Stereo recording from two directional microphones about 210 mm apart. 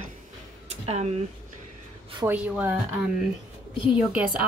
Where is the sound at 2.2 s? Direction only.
10° right (ahead or behind).